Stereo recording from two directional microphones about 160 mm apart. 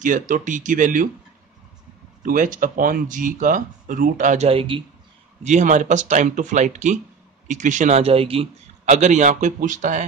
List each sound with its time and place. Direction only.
0.0 s speech: 55° right (ahead or behind)
2.2 s speech: 55° right (ahead or behind)
4.5 s a man's voice: 35° right (ahead or behind)
5.4 s speech: 50° right (ahead or behind)
8.8 s speech: 50° right (ahead or behind)